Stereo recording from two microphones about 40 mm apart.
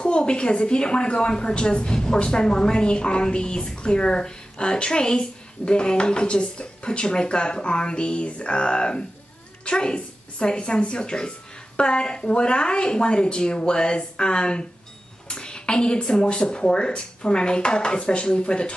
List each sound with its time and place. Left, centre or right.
0.0 s a woman's voice: left